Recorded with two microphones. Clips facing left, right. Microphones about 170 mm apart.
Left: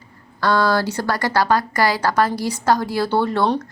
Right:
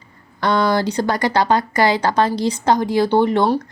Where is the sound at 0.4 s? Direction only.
20° right (ahead or behind).